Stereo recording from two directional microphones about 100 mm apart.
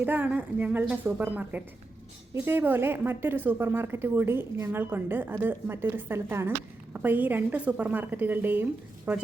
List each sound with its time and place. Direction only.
0.0 s a woman's voice: 20° right (ahead or behind)